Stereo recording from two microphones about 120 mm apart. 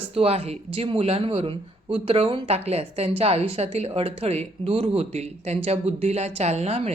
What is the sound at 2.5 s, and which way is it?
A woman's voice, 60° right (ahead or behind).